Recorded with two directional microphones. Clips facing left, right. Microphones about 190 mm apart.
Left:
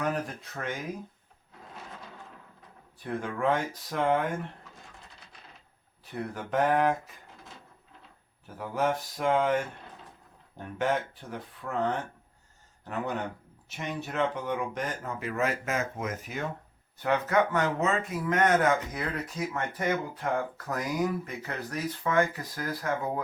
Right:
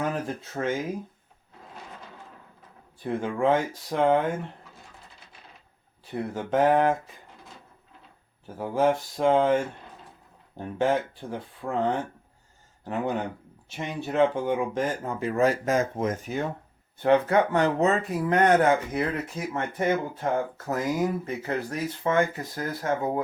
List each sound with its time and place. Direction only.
0.0 s speech: 25° right (ahead or behind)
3.0 s speech: 25° right (ahead or behind)
6.1 s speech: 25° right (ahead or behind)
8.5 s speech: 30° right (ahead or behind)